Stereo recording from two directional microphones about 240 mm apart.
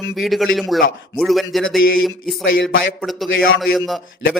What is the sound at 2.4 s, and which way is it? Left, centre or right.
Speech, left.